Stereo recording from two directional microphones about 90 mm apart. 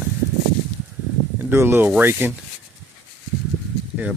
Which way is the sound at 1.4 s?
30° right (ahead or behind).